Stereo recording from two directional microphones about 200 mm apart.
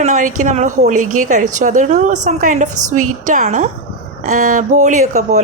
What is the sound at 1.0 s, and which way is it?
Speech, 90° right.